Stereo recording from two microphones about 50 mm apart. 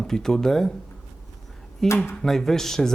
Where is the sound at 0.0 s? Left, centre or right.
Centre.